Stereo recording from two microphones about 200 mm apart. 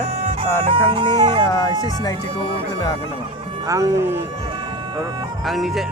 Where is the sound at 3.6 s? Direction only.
15° right (ahead or behind).